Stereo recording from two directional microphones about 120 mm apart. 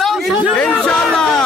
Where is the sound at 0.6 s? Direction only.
10° left (ahead or behind).